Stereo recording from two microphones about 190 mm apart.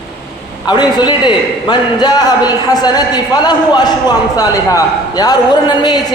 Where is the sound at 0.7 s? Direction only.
20° left (ahead or behind).